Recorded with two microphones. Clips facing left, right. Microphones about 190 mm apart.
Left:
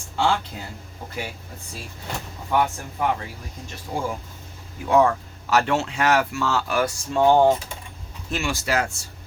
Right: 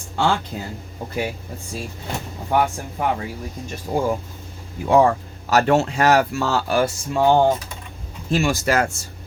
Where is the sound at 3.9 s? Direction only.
45° right (ahead or behind).